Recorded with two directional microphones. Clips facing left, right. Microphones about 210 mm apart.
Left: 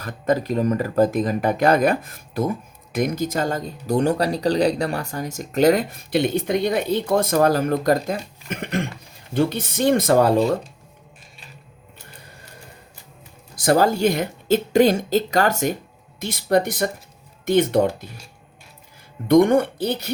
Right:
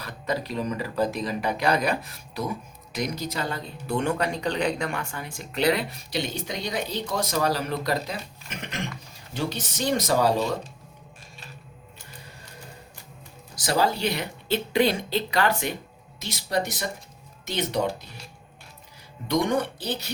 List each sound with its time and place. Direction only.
0.0 s speech: 50° left (ahead or behind)
13.6 s speech: 50° left (ahead or behind)
19.3 s speech: 55° left (ahead or behind)